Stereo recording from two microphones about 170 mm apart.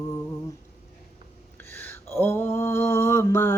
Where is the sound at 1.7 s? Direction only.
15° left (ahead or behind).